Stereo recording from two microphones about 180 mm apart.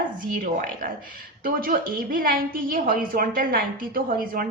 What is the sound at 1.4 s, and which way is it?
A woman's voice, 55° right (ahead or behind).